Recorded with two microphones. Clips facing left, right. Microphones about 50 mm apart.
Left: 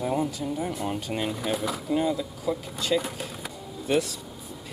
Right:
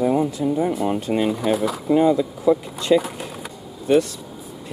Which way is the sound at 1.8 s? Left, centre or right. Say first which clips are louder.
Right 10 dB; centre.